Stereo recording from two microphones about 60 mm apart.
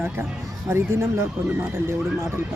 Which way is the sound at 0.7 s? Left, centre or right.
Right.